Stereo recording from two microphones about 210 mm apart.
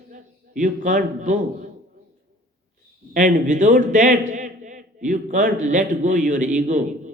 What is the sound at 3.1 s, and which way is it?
A man's voice, 40° right (ahead or behind).